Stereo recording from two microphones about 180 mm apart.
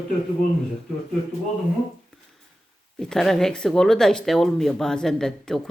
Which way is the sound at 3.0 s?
Centre (ahead or behind).